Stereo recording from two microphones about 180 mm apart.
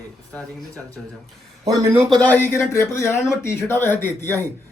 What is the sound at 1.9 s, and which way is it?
Speech, centre (ahead or behind).